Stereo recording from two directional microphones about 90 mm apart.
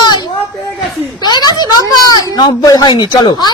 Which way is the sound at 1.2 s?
50° left (ahead or behind).